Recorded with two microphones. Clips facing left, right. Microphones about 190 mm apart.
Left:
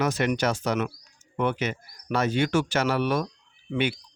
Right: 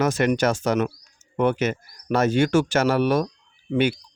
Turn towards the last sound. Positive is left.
turn(degrees=-40)  # may be behind; listen again after turning